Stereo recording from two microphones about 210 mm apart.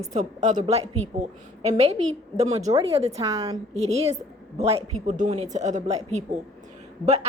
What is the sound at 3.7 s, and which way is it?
A woman's voice, 30° right (ahead or behind).